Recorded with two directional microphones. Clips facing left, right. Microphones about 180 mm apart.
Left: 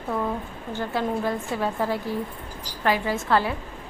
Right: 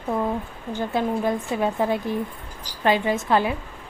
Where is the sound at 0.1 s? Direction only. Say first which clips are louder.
Right 2 dB; 20° right (ahead or behind).